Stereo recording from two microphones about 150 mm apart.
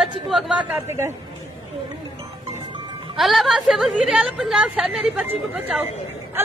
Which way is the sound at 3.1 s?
Centre (ahead or behind).